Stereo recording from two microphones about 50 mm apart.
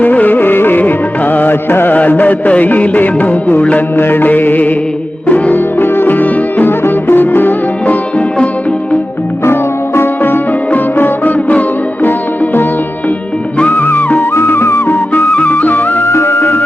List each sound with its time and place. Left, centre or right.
0.0 s music: left
3.9 s music: left
9.4 s music: left
13.6 s music: left
14.3 s music: left
15.4 s music: left
16.0 s music: left